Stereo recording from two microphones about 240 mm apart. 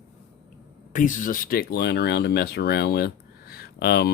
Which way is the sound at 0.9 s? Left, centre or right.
Left.